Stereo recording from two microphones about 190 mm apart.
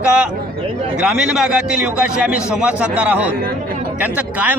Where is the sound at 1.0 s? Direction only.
5° right (ahead or behind).